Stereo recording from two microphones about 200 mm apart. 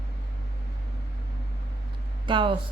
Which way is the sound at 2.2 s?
25° right (ahead or behind).